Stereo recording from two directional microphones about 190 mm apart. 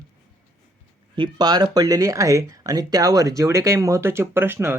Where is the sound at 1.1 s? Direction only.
25° right (ahead or behind).